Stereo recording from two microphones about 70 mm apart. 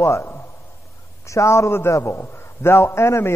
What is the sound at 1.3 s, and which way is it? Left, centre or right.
A man's voice, left.